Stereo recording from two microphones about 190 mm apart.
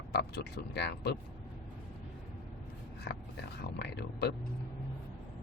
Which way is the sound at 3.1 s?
60° left (ahead or behind).